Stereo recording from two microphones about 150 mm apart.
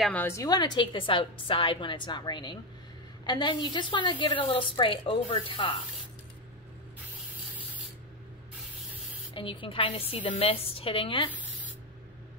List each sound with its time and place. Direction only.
0.1 s a woman's voice: 15° left (ahead or behind); by 5.8 s 35° left (ahead or behind)
9.3 s a woman's voice: 35° left (ahead or behind)